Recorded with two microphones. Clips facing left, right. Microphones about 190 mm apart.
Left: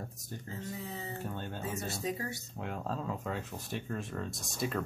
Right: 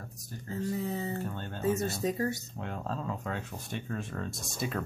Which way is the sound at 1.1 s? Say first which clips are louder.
Right 3 dB; 10° left (ahead or behind).